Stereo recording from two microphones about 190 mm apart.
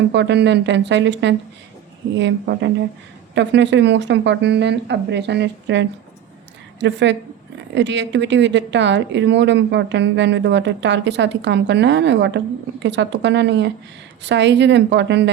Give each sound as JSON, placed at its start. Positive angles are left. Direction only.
{"t": 0.1, "sound": "a woman's voice", "side_deg": -65}